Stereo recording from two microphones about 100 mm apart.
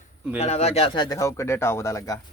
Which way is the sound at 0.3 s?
90° left.